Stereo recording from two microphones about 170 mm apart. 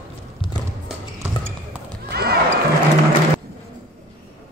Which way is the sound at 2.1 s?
70° right (ahead or behind).